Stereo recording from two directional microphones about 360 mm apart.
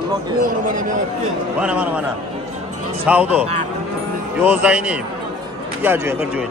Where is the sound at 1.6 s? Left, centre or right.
Centre.